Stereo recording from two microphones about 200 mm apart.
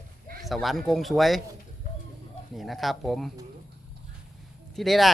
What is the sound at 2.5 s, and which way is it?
Speech, centre (ahead or behind).